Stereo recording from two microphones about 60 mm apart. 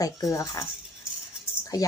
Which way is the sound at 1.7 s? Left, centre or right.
Left.